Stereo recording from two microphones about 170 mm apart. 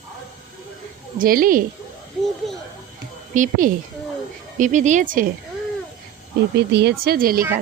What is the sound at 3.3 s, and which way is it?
A woman's voice, 50° right (ahead or behind).